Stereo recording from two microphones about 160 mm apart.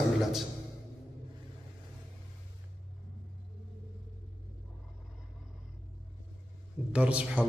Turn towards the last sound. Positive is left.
turn(degrees=-10)  # may be behind; listen again after turning